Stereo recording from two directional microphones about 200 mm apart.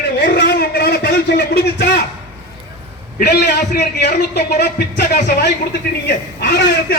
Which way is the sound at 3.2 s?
55° left (ahead or behind).